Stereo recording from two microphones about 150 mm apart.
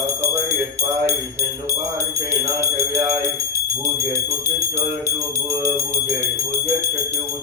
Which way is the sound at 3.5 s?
20° right (ahead or behind).